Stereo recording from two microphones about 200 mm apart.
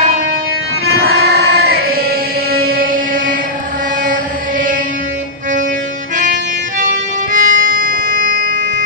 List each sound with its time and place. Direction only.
1.0 s music: 55° right (ahead or behind)
4.1 s vehicle: 40° right (ahead or behind)
6.8 s music: 40° right (ahead or behind)